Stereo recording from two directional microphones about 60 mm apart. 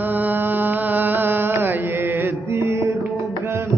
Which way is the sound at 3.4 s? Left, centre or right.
Right.